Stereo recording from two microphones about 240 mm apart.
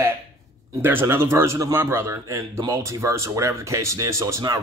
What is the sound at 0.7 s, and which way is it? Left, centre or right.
Speech, centre.